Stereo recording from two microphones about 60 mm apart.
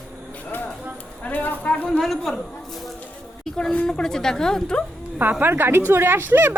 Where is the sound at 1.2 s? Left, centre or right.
Left.